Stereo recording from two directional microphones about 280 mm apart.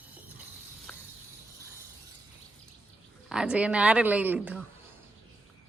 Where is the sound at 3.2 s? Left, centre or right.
Centre.